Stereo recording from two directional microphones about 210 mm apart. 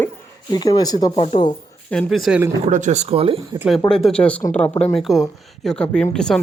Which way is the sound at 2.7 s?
35° right (ahead or behind).